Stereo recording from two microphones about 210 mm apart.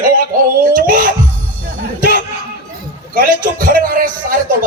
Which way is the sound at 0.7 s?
40° right (ahead or behind).